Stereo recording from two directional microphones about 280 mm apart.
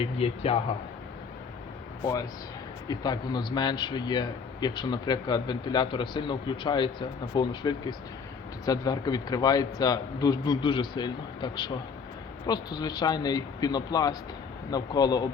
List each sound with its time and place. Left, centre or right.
0.0 s speech: left
2.8 s speech: centre